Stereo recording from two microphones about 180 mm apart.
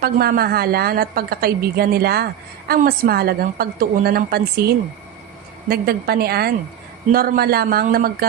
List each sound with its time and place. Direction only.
0.0 s a woman's voice: 55° right (ahead or behind)
5.6 s a woman's voice: 55° right (ahead or behind)